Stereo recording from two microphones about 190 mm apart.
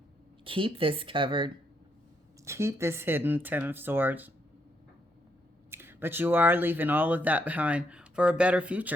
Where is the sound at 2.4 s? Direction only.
15° right (ahead or behind).